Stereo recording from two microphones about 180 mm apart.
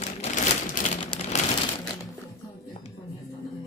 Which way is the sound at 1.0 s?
30° left (ahead or behind).